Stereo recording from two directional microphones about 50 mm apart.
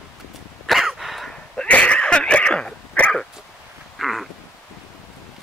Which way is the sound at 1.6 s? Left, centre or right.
Left.